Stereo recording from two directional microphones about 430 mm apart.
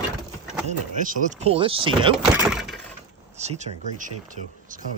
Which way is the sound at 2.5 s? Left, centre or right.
Centre.